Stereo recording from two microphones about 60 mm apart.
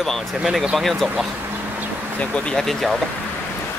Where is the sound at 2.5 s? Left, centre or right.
Centre.